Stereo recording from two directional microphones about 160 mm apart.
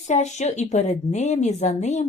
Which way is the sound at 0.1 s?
45° left (ahead or behind).